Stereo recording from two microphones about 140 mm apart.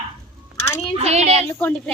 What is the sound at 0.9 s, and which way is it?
Child singing, 50° right (ahead or behind).